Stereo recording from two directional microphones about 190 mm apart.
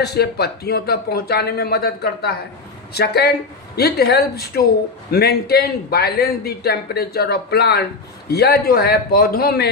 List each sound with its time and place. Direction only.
0.0 s a man's voice: 60° left (ahead or behind)